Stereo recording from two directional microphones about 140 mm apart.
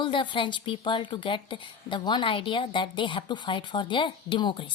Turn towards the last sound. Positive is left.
turn(degrees=35)  # may be behind; listen again after turning